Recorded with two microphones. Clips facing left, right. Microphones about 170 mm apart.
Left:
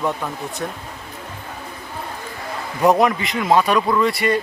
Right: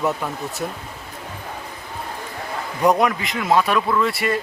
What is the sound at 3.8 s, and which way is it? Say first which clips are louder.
Speech: left 2 dB; 15° left (ahead or behind).